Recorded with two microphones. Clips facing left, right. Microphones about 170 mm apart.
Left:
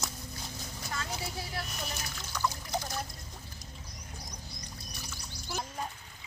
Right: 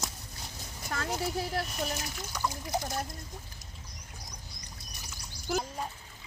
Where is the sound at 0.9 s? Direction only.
50° right (ahead or behind).